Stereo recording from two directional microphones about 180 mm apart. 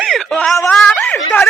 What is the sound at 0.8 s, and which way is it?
Speech, 5° left (ahead or behind).